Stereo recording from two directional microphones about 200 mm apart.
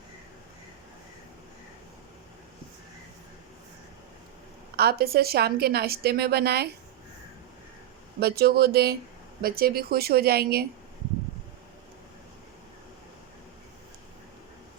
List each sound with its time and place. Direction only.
4.8 s a woman's voice: 50° right (ahead or behind)
8.2 s a woman's voice: 50° right (ahead or behind)